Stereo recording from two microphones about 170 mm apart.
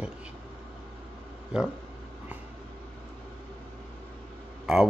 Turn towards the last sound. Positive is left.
turn(degrees=-5)  # may be behind; listen again after turning